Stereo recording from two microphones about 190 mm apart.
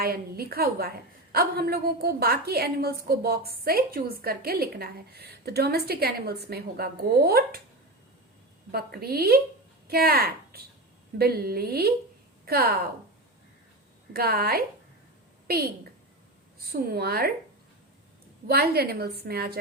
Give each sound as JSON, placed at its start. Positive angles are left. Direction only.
{"t": 0.0, "sound": "a woman's voice", "side_deg": -55}
{"t": 8.7, "sound": "a woman's voice", "side_deg": -55}
{"t": 14.1, "sound": "a woman's voice", "side_deg": -55}
{"t": 18.4, "sound": "a woman's voice", "side_deg": -55}